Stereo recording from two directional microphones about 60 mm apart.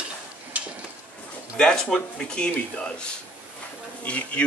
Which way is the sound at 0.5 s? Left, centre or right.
Right.